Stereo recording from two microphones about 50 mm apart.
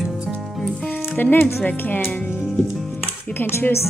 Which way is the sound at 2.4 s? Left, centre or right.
Centre.